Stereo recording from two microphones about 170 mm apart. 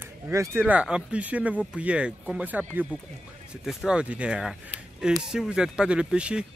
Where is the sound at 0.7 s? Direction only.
5° right (ahead or behind).